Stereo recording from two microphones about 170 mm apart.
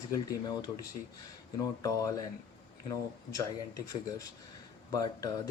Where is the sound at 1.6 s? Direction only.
20° left (ahead or behind).